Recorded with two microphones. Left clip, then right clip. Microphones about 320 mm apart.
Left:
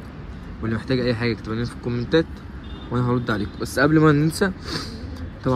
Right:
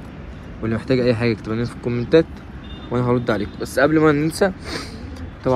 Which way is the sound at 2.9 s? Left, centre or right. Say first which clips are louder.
Right 4 dB; centre.